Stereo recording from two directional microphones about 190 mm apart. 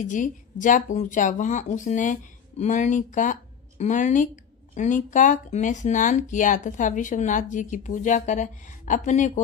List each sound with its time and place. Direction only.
0.0 s speech: 40° left (ahead or behind)